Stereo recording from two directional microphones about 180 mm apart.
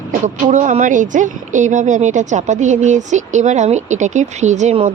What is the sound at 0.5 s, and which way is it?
A woman's voice, 45° right (ahead or behind).